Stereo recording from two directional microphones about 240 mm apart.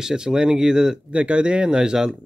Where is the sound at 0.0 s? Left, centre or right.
Centre.